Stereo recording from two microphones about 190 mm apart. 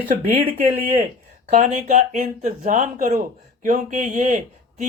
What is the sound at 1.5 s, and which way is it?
Speech, 40° right (ahead or behind).